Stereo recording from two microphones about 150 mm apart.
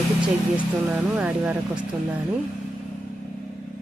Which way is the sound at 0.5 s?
10° right (ahead or behind).